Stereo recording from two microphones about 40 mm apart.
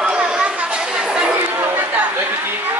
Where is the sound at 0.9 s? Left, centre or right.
Right.